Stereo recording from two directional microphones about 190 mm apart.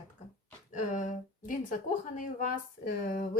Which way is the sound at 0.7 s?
40° left (ahead or behind).